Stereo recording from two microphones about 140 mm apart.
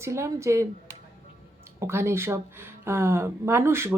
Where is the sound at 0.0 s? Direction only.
20° right (ahead or behind).